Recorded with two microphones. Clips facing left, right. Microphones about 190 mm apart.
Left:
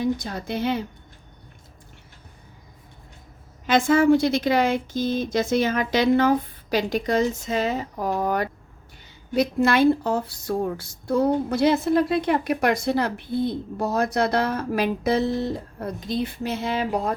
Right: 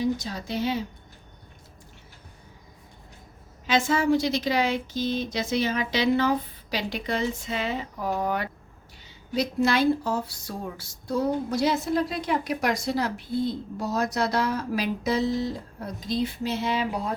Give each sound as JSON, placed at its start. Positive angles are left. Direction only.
{"t": 0.0, "sound": "speech", "side_deg": 55}
{"t": 3.7, "sound": "a woman's voice", "side_deg": 50}
{"t": 9.3, "sound": "speech", "side_deg": 55}